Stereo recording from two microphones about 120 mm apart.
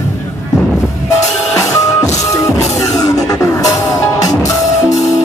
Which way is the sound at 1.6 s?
25° left (ahead or behind).